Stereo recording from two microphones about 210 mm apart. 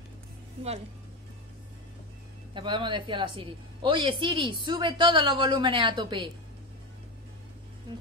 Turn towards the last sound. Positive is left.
turn(degrees=-20)  # may be behind; listen again after turning